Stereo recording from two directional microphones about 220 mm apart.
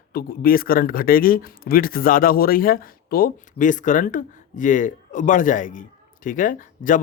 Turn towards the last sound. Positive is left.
turn(degrees=35)  # may be behind; listen again after turning